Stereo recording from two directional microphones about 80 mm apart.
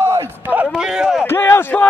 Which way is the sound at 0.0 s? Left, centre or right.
Right.